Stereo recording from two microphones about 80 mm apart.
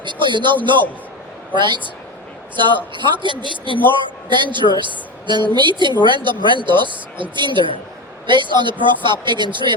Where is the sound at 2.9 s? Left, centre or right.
Right.